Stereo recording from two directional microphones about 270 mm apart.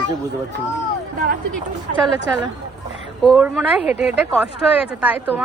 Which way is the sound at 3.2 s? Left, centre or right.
Centre.